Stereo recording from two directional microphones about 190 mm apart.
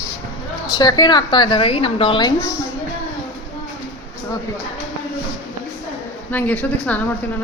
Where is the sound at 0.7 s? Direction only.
20° left (ahead or behind).